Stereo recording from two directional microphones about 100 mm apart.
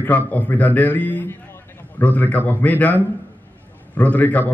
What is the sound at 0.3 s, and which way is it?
A man's voice, 15° left (ahead or behind).